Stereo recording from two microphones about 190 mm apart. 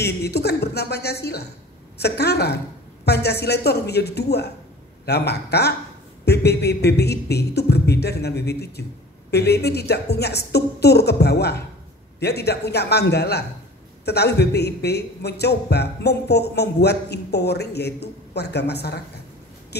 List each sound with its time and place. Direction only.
0.0 s a man's voice: 60° left (ahead or behind)
6.2 s a sound: 60° left (ahead or behind)
9.3 s a man's voice: 60° left (ahead or behind)